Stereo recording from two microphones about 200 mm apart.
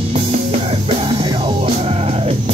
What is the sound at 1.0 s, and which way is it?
Music, 25° right (ahead or behind).